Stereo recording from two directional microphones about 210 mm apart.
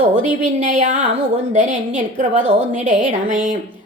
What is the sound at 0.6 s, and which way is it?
A woman's voice, 40° right (ahead or behind).